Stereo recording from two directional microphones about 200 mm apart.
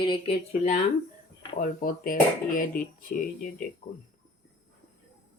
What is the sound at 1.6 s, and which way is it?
Speech, 45° left (ahead or behind).